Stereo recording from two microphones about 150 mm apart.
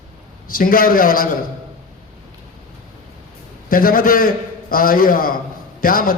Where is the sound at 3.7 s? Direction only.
70° left (ahead or behind).